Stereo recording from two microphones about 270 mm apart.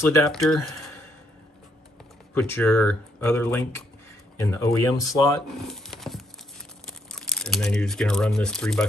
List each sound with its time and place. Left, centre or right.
0.0 s speech: centre
2.3 s speech: centre
5.7 s a sound: centre
6.9 s speech: centre